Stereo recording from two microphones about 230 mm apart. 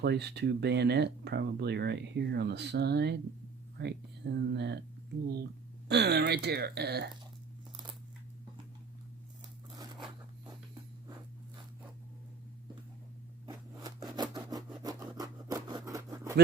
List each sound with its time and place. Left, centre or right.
0.0 s speech: right
5.9 s speech: right
14.2 s a sound: centre